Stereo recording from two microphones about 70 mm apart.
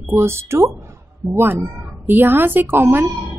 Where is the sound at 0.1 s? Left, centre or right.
Right.